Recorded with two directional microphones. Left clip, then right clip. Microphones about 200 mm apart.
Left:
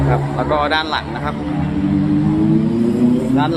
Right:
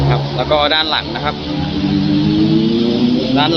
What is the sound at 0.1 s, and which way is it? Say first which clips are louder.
Speech: right 3 dB; 5° left (ahead or behind).